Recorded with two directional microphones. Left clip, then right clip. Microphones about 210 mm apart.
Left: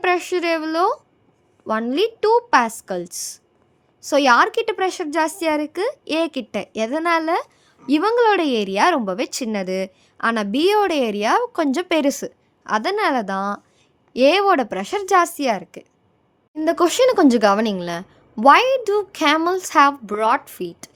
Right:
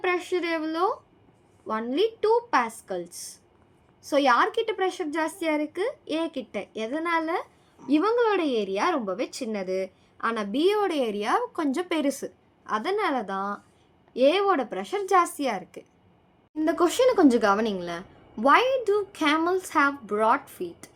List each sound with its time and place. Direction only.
0.0 s a woman's voice: 50° left (ahead or behind)